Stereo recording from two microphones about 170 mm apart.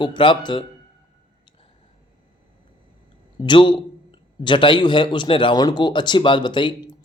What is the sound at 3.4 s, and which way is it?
A man's voice, 30° left (ahead or behind).